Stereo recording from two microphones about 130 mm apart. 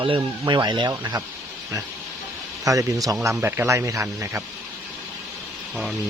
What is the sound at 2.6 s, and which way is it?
Speech, 25° right (ahead or behind).